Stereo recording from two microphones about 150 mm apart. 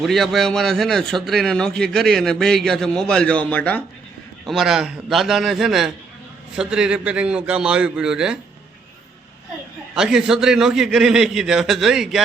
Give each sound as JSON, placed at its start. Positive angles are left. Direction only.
{"t": 0.0, "sound": "a man's voice", "side_deg": 0}
{"t": 4.4, "sound": "a man's voice", "side_deg": 0}
{"t": 9.9, "sound": "a man's voice", "side_deg": -5}